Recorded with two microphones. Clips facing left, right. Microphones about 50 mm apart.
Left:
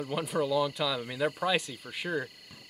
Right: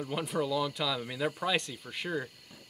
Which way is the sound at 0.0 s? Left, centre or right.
Centre.